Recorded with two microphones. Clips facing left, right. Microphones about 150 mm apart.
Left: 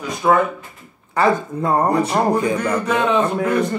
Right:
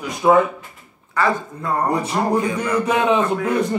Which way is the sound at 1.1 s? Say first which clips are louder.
Left 3 dB; 25° left (ahead or behind).